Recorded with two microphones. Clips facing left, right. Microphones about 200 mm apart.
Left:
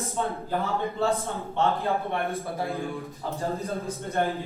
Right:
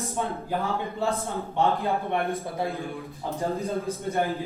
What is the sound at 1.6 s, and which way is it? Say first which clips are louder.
Speech: right 1 dB; 15° right (ahead or behind).